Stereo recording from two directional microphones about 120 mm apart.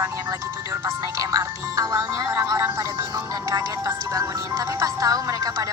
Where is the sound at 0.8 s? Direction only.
30° right (ahead or behind).